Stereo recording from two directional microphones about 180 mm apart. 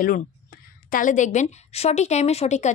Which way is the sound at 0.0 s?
50° left (ahead or behind).